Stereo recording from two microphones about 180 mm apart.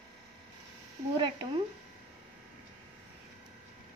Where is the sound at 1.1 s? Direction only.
25° right (ahead or behind).